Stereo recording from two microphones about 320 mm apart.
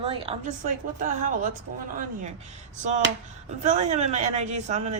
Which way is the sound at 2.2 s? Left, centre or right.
Right.